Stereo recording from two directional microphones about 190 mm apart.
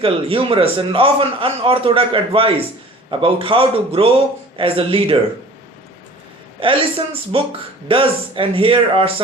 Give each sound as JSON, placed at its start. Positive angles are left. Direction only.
{"t": 0.0, "sound": "a man's voice", "side_deg": -30}
{"t": 6.6, "sound": "a man's voice", "side_deg": -30}